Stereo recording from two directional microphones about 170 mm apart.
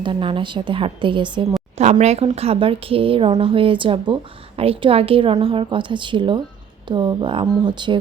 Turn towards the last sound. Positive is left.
turn(degrees=-25)  # may be behind; listen again after turning